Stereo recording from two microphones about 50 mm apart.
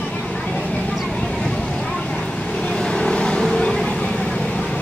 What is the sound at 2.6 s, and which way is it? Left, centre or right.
Vehicle, centre.